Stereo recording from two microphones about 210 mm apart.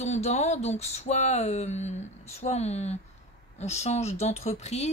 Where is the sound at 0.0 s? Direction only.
35° left (ahead or behind).